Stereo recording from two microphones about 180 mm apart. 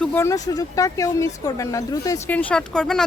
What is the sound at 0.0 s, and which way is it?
Speech, 10° left (ahead or behind).